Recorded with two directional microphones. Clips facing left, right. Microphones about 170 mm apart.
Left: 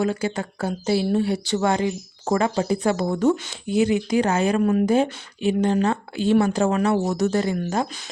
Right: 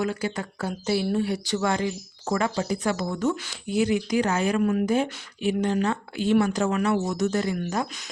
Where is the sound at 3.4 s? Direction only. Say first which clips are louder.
Left 4 dB; 25° left (ahead or behind).